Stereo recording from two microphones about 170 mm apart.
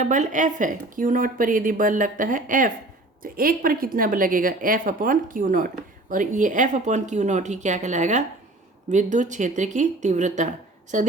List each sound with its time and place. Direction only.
0.0 s a woman's voice: 50° right (ahead or behind)